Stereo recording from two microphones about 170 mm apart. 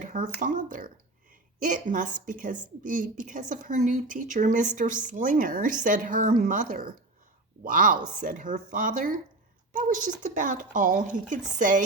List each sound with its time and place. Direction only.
0.0 s a woman's voice: 50° right (ahead or behind)